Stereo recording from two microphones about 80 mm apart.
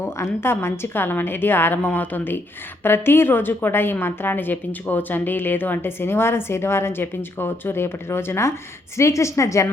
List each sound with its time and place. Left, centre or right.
0.0 s a woman's voice: left